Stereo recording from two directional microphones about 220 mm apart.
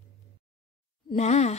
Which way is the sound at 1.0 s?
30° left (ahead or behind).